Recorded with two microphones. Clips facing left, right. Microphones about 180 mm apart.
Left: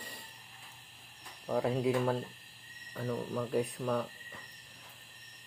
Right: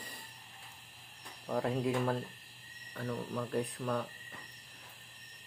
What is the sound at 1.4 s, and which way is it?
Speech, centre (ahead or behind).